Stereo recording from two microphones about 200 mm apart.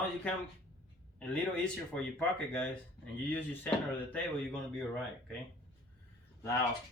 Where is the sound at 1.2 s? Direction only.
5° left (ahead or behind).